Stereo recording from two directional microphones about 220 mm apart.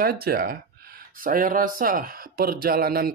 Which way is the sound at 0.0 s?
45° right (ahead or behind).